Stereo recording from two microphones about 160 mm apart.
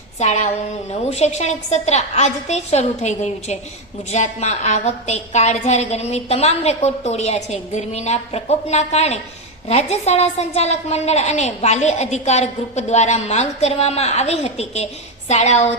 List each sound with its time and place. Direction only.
0.2 s a woman's voice: 50° left (ahead or behind)